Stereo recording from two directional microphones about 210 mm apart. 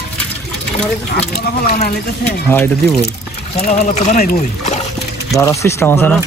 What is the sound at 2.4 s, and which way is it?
Speech, 10° left (ahead or behind).